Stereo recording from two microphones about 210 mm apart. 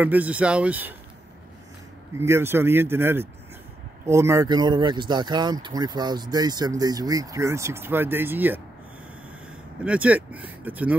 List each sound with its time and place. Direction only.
0.0 s speech: 10° right (ahead or behind)
2.1 s speech: 10° right (ahead or behind)
9.8 s speech: 5° right (ahead or behind)